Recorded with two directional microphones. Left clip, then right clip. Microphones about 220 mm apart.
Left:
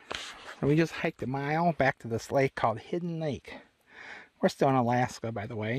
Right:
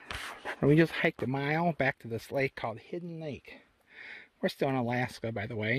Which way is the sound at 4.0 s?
25° left (ahead or behind).